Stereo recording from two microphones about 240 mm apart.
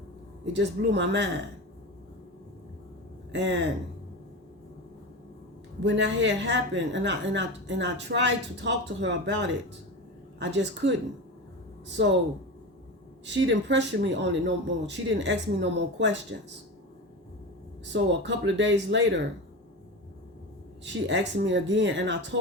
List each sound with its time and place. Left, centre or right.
0.5 s a woman's voice: right
3.3 s a woman's voice: right
5.8 s a woman's voice: right
12.0 s a woman's voice: right
13.3 s a woman's voice: right
17.8 s a woman's voice: right
20.8 s a woman's voice: right